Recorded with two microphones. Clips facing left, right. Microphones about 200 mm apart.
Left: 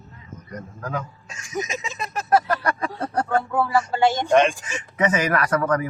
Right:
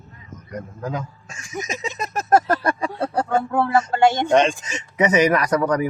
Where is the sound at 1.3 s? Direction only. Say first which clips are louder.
Left 1 dB; 40° right (ahead or behind).